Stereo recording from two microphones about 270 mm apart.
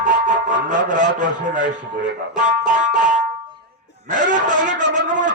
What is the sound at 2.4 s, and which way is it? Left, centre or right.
Speech, right.